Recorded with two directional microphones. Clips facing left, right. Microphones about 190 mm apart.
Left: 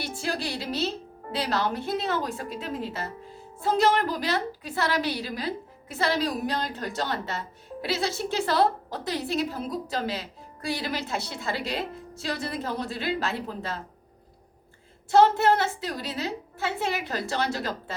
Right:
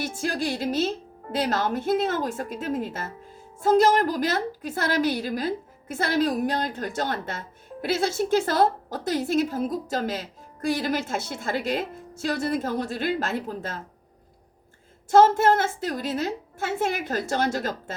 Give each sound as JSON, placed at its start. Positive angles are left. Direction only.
{"t": 0.0, "sound": "a woman's voice", "side_deg": -50}
{"t": 15.1, "sound": "a woman's voice", "side_deg": -45}